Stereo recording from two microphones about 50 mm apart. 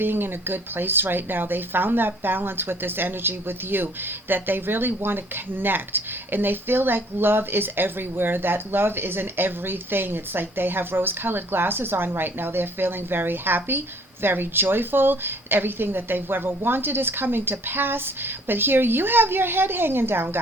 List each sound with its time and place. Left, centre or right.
0.0 s speech: right